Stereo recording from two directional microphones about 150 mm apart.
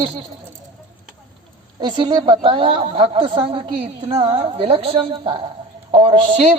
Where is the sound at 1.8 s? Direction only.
30° right (ahead or behind).